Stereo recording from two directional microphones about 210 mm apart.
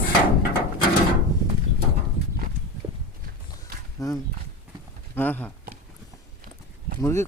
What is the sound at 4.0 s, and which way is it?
Speech, 15° left (ahead or behind).